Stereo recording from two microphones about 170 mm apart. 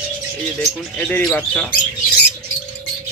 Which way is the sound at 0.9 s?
5° left (ahead or behind).